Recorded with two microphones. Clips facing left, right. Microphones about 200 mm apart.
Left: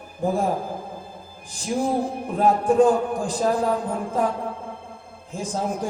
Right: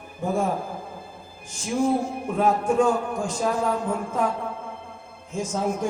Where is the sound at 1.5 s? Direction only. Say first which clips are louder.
Even; 35° left (ahead or behind).